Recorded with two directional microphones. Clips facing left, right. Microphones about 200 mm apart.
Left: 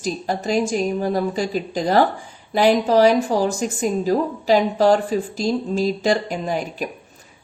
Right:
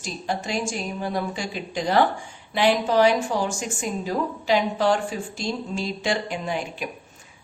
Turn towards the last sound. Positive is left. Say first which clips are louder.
# left 4 dB
turn(degrees=40)  # may be behind; listen again after turning